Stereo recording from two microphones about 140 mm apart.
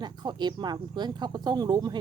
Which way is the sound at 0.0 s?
30° right (ahead or behind).